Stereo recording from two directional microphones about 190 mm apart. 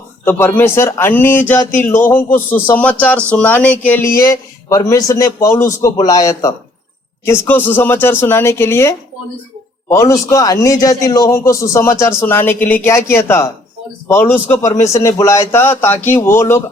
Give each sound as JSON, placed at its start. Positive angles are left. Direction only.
{"t": 0.3, "sound": "a man's voice", "side_deg": 10}